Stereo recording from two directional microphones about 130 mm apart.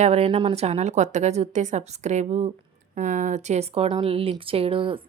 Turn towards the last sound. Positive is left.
turn(degrees=-40)  # may be behind; listen again after turning